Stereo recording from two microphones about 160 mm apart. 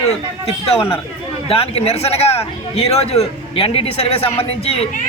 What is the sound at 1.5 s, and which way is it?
A man's voice, 40° left (ahead or behind).